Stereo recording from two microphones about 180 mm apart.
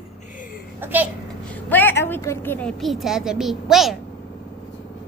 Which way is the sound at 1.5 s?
10° left (ahead or behind).